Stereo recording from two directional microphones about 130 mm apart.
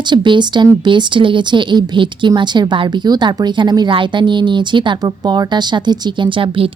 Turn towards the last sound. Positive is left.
turn(degrees=-45)  # may be behind; listen again after turning